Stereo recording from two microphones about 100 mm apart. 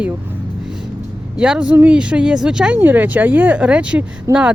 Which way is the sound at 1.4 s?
10° right (ahead or behind).